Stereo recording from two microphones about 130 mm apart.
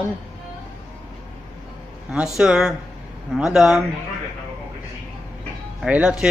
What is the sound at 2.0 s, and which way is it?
Speech, 5° right (ahead or behind).